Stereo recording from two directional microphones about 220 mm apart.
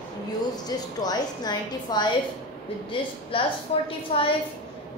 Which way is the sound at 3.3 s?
25° left (ahead or behind).